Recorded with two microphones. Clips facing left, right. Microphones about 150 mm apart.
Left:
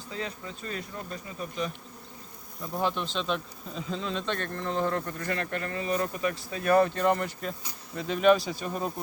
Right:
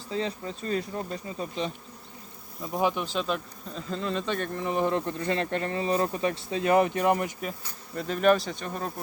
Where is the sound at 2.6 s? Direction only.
15° right (ahead or behind).